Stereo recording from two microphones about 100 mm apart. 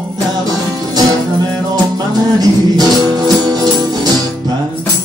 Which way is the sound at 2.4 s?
40° right (ahead or behind).